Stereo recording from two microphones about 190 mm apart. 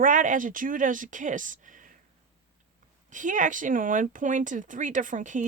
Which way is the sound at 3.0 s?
40° right (ahead or behind).